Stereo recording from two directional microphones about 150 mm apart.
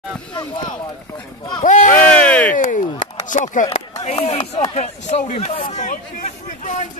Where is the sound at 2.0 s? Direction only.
10° left (ahead or behind).